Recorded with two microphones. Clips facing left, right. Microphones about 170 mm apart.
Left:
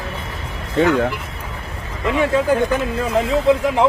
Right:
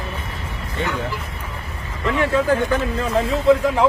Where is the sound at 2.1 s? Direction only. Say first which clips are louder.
Left 1 dB; 15° left (ahead or behind).